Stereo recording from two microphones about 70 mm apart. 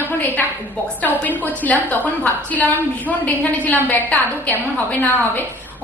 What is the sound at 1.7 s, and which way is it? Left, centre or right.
A woman's voice, left.